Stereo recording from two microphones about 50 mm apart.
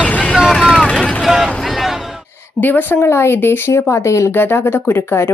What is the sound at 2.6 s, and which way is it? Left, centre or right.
Speech, left.